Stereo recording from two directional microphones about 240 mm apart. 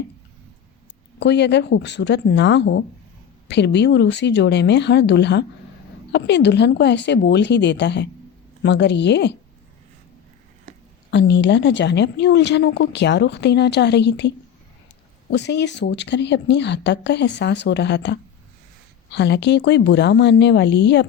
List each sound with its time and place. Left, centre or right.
1.2 s a woman's voice: left
11.1 s a woman's voice: left